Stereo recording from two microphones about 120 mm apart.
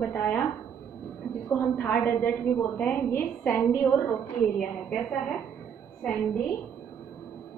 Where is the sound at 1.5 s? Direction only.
15° left (ahead or behind).